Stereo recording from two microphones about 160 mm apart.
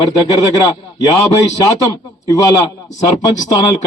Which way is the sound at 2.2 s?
20° left (ahead or behind).